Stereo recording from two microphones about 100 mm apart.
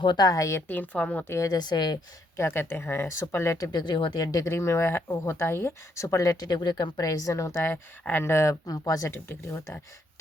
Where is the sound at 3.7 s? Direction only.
50° left (ahead or behind).